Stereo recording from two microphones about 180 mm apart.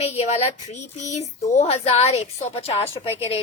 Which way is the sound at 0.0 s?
35° left (ahead or behind).